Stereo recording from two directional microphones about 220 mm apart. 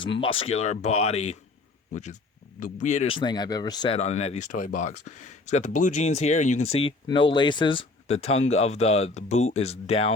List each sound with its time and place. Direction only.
0.0 s speech: 20° left (ahead or behind)